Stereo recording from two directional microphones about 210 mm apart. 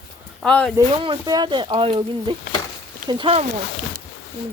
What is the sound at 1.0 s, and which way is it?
Speech, 20° right (ahead or behind).